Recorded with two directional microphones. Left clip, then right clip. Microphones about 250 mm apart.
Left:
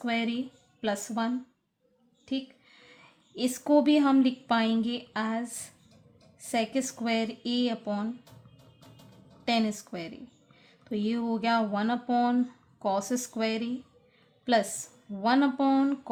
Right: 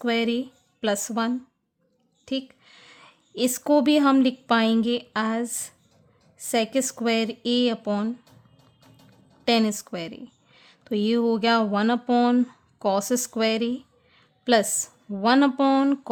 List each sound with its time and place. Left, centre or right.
0.0 s speech: right
9.4 s speech: right